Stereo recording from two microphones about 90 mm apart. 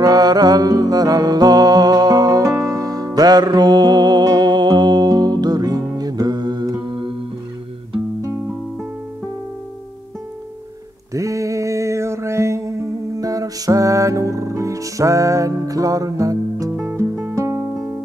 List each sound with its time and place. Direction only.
0.0 s music: 45° right (ahead or behind)
11.1 s music: 35° right (ahead or behind)